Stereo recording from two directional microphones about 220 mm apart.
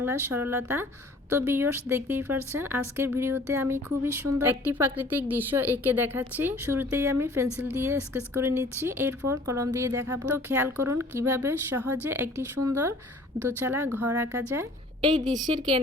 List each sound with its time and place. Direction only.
0.0 s speech: 10° right (ahead or behind)
13.6 s speech: 10° right (ahead or behind)
15.5 s speech: 25° right (ahead or behind)